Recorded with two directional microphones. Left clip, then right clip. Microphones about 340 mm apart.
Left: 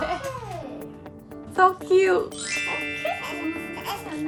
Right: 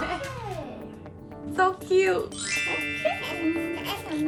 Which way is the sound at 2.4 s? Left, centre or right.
Centre.